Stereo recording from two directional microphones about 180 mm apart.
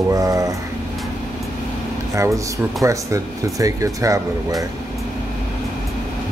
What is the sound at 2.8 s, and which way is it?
Speech, 15° right (ahead or behind).